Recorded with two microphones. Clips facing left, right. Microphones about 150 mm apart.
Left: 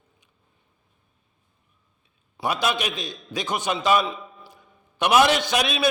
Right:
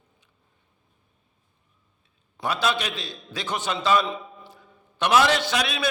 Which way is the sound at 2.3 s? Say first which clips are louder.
Left 1 dB; 15° left (ahead or behind).